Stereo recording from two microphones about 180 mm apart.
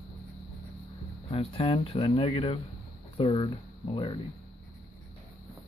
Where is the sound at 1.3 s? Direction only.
30° left (ahead or behind).